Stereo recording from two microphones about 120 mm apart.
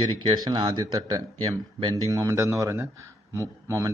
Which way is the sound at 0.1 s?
45° right (ahead or behind).